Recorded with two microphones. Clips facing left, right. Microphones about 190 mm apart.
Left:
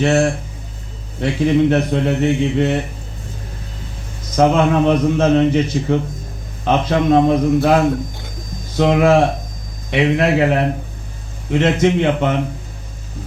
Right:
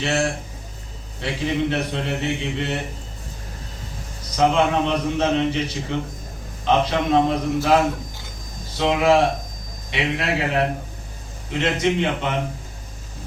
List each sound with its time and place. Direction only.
0.0 s a man's voice: 50° left (ahead or behind)
4.4 s a man's voice: 50° left (ahead or behind)
8.8 s a man's voice: 50° left (ahead or behind)